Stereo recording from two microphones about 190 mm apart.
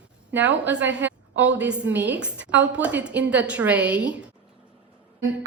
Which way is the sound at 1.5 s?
5° right (ahead or behind).